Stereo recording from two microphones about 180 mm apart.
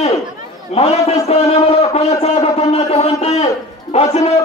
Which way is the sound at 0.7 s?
35° left (ahead or behind).